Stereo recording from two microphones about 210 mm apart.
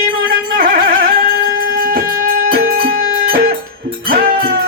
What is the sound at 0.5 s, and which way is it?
Music, 45° right (ahead or behind).